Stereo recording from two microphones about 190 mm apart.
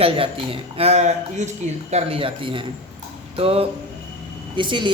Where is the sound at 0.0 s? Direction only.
30° right (ahead or behind).